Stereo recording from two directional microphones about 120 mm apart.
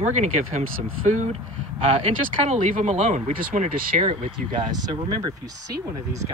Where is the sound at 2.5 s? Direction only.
80° right.